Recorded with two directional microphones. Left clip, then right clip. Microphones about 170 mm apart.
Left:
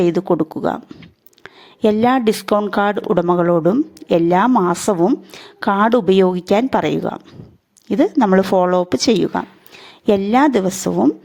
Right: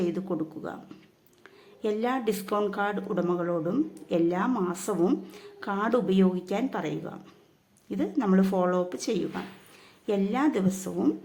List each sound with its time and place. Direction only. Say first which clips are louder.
0.0 s speech: left 14 dB; 55° left (ahead or behind)
1.8 s speech: left 14 dB; 55° left (ahead or behind)